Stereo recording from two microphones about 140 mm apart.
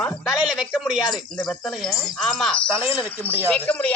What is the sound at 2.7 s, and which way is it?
Speech, 15° right (ahead or behind).